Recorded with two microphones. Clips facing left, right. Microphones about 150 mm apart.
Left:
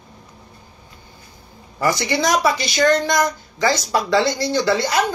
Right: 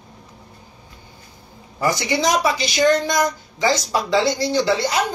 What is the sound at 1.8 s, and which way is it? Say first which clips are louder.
A woman's voice: even; 15° right (ahead or behind).